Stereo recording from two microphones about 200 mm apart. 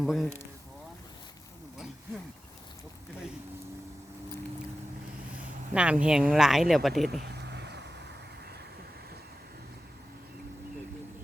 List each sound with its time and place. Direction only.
0.0 s speech: centre (ahead or behind)
5.7 s speech: 5° right (ahead or behind)
7.1 s a sound: 55° right (ahead or behind)